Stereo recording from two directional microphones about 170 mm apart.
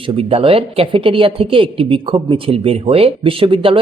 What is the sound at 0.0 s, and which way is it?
Speech, 35° right (ahead or behind).